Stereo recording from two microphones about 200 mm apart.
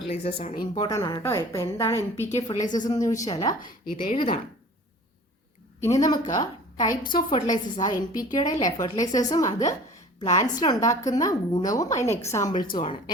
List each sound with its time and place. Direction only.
0.1 s a woman's voice: 30° left (ahead or behind); by 2.3 s 15° left (ahead or behind)
2.3 s a woman's voice: 35° left (ahead or behind)
2.7 s a woman's voice: 20° left (ahead or behind)
5.8 s a woman's voice: 15° left (ahead or behind)